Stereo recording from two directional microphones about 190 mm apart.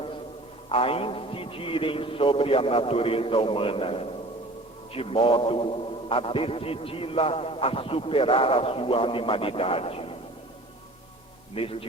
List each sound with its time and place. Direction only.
0.7 s a man's voice: 30° left (ahead or behind)
11.5 s a man's voice: 30° left (ahead or behind)